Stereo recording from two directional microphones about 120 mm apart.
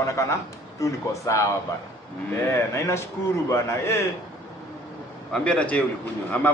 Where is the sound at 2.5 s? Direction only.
25° left (ahead or behind).